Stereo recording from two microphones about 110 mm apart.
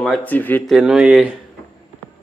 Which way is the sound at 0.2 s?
15° left (ahead or behind).